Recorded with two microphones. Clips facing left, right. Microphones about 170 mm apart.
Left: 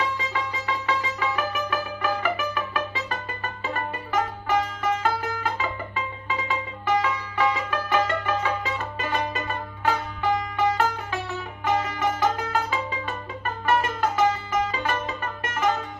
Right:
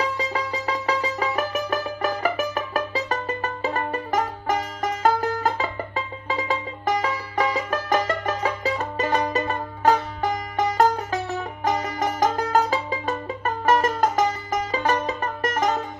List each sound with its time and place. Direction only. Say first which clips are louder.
0.9 s music: right 2 dB; 40° right (ahead or behind)